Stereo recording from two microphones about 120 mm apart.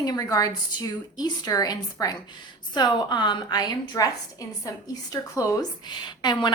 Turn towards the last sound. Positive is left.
turn(degrees=40)  # may be behind; listen again after turning